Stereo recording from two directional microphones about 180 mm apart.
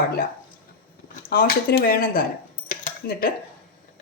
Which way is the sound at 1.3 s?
55° left (ahead or behind).